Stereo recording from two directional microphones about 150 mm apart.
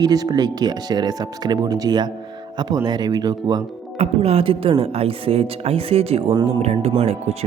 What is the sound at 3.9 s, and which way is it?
Speech, 40° right (ahead or behind).